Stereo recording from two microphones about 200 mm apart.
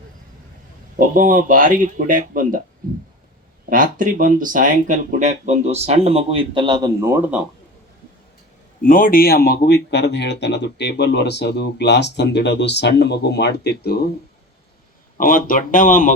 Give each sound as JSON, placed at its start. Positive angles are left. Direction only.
{"t": 0.9, "sound": "speech", "side_deg": -45}
{"t": 3.7, "sound": "speech", "side_deg": -45}
{"t": 8.8, "sound": "speech", "side_deg": 45}
{"t": 15.2, "sound": "speech", "side_deg": 45}